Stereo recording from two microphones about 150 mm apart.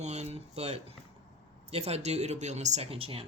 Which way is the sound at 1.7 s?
45° right (ahead or behind).